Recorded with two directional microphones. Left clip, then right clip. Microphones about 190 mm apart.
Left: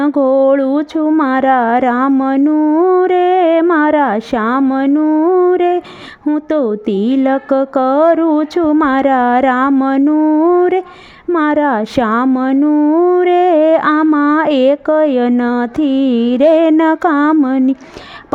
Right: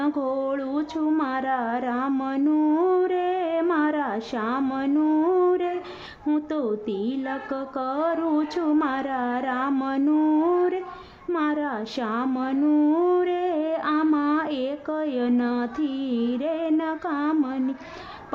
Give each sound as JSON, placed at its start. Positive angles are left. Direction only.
{"t": 0.0, "sound": "speech", "side_deg": 45}
{"t": 4.6, "sound": "mantra", "side_deg": 40}
{"t": 6.2, "sound": "speech", "side_deg": 45}
{"t": 9.7, "sound": "mantra", "side_deg": 40}
{"t": 11.3, "sound": "speech", "side_deg": 50}